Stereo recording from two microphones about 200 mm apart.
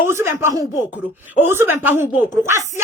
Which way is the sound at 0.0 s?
15° right (ahead or behind).